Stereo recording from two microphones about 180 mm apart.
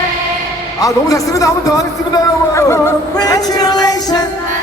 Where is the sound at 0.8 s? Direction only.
20° left (ahead or behind).